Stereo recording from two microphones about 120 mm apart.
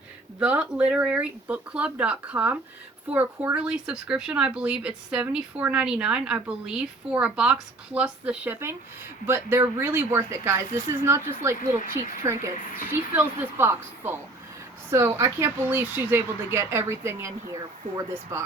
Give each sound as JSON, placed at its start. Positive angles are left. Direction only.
{"t": 0.3, "sound": "speech", "side_deg": -10}